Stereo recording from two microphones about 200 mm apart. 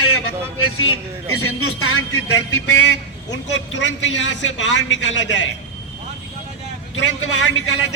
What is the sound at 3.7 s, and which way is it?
A man's voice, 65° left (ahead or behind).